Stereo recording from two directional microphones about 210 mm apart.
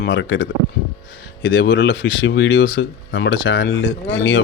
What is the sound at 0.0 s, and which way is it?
Speech, 60° left (ahead or behind).